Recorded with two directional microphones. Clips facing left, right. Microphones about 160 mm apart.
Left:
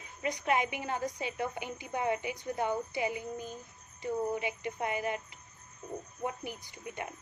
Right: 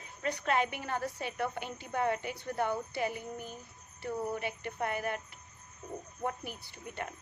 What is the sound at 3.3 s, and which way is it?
Speech, 15° right (ahead or behind).